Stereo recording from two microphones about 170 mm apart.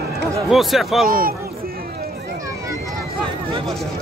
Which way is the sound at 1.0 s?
55° right (ahead or behind).